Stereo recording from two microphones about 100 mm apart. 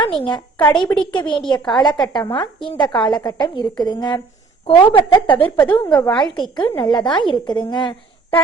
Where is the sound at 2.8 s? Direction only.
50° left (ahead or behind).